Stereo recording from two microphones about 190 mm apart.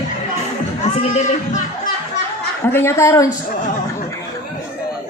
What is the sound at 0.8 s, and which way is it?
Speech, 35° left (ahead or behind).